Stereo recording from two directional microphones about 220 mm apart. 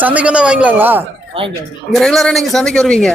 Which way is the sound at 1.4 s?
25° right (ahead or behind).